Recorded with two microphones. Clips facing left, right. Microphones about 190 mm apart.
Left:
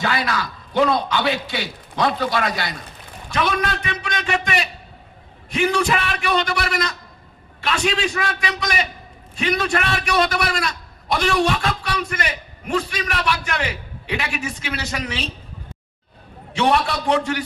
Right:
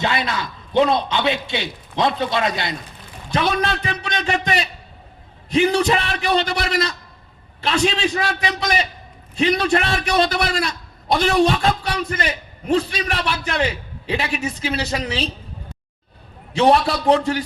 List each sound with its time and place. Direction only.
0.0 s a man's voice: 25° right (ahead or behind)
16.5 s a man's voice: 35° right (ahead or behind)